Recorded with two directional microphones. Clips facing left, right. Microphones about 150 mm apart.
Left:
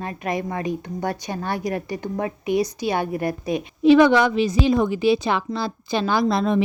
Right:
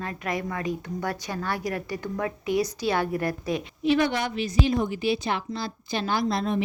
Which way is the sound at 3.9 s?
90° left.